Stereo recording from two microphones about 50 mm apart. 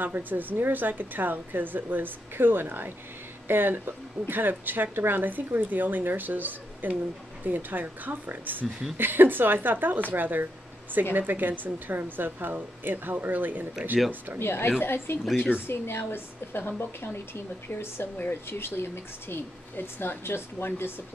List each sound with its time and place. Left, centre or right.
0.0 s speech: right
14.4 s speech: left
15.2 s speech: centre
15.6 s speech: left
18.1 s speech: left